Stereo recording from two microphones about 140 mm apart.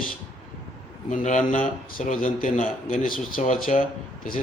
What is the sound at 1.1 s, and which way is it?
A man's voice, 65° left (ahead or behind).